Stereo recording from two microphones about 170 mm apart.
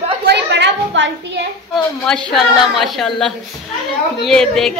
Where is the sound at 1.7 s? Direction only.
5° left (ahead or behind).